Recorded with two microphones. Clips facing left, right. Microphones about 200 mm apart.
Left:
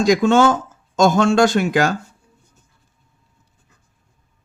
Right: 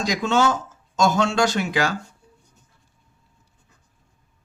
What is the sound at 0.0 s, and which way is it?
Speech, 50° left (ahead or behind).